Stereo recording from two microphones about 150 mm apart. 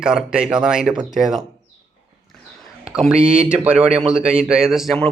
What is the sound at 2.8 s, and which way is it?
A man's voice, 5° right (ahead or behind).